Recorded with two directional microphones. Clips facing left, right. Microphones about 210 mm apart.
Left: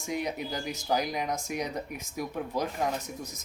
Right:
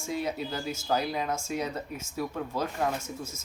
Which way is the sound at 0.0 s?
15° left (ahead or behind).